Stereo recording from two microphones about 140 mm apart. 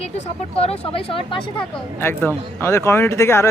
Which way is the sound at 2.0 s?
15° left (ahead or behind).